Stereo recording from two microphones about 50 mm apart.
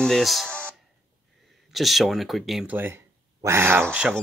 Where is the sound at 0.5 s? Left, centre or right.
Left.